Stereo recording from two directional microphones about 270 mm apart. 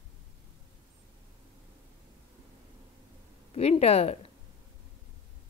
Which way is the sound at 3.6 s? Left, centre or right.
Left.